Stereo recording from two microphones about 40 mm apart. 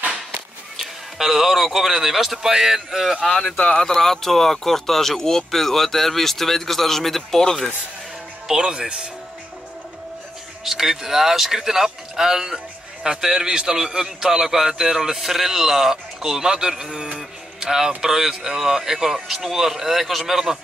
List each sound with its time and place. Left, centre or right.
0.7 s a man's voice: centre
3.3 s speech: centre
3.5 s speech: left
3.8 s speech: centre
8.5 s speech: centre
10.6 s speech: centre